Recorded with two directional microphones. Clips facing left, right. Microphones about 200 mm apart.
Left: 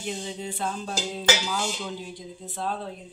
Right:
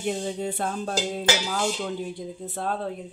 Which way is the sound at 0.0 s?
50° right (ahead or behind).